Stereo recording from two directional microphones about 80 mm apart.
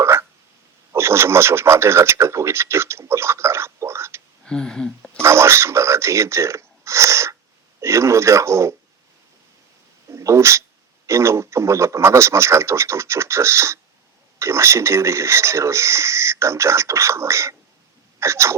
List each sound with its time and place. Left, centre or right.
0.0 s a sound: right
0.9 s speech: right
4.4 s speech: centre
5.2 s a sound: right
7.8 s speech: right
10.1 s hiccup: right
11.0 s speech: right
18.2 s sneeze: right